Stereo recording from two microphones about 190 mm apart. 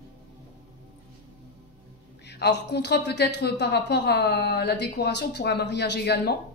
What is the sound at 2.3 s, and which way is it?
A woman's voice, 60° left (ahead or behind).